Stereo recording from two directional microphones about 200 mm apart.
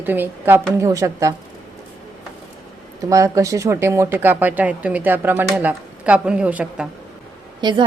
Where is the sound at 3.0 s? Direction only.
15° right (ahead or behind).